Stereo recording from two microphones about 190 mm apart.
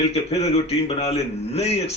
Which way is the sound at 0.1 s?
30° left (ahead or behind).